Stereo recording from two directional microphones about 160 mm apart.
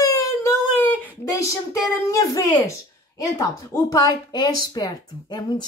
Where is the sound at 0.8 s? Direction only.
10° left (ahead or behind).